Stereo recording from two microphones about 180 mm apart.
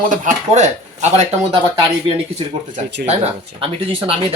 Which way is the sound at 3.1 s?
35° right (ahead or behind).